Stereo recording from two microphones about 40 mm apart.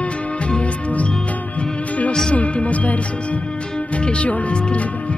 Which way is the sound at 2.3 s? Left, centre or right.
Left.